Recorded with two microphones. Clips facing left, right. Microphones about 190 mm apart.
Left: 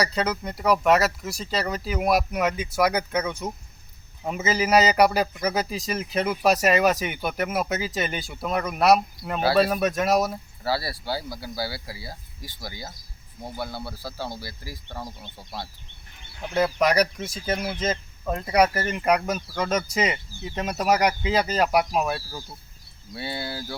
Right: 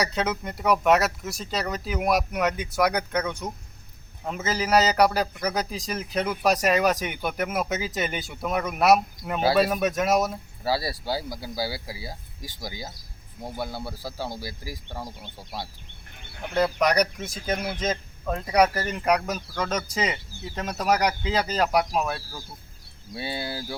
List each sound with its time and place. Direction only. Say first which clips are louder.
0.0 s a man's voice: left 1 dB; centre (ahead or behind)
10.6 s speech: right 1 dB; 15° right (ahead or behind)
16.6 s a man's voice: left 1 dB; 5° left (ahead or behind)
23.1 s speech: even; 15° right (ahead or behind)